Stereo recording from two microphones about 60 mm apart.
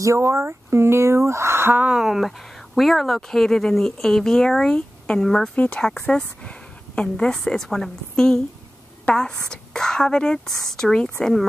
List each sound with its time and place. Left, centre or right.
0.2 s speech: right
1.9 s speech: centre
4.7 s a sound: left
5.2 s speech: centre
7.0 s speech: centre